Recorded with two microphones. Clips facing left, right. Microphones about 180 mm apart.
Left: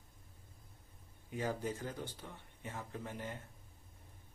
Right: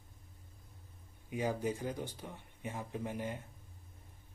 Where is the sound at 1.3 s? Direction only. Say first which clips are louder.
Right 3 dB; 15° right (ahead or behind).